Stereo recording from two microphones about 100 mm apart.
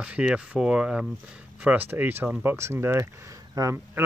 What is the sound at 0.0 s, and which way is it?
Speech, 10° right (ahead or behind).